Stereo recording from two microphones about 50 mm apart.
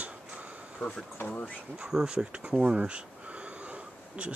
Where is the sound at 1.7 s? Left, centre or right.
Centre.